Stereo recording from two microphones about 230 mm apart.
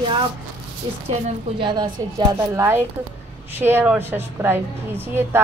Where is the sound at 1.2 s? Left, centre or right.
Right.